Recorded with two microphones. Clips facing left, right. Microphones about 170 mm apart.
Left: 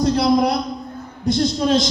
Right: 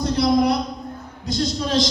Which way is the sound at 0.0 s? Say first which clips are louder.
Left 2 dB; 60° left (ahead or behind).